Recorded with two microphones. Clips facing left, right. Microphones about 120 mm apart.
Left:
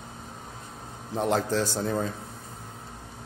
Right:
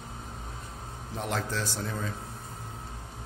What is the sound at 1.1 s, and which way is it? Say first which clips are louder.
Speech: left 7 dB; 35° left (ahead or behind).